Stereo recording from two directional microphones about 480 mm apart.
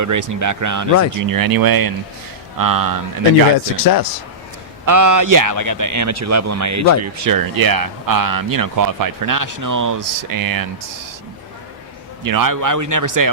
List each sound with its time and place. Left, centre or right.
0.0 s speech: right
3.8 s speech: left
4.9 s speech: right
12.2 s speech: right